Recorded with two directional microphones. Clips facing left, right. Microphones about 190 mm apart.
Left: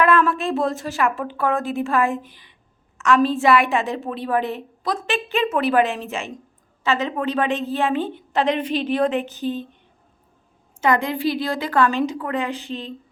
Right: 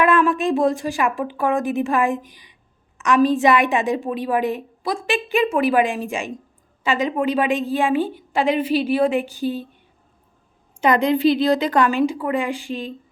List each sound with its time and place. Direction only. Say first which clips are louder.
0.0 s a woman's voice: right 1 dB; 15° right (ahead or behind)
10.8 s a woman's voice: right 3 dB; 20° right (ahead or behind)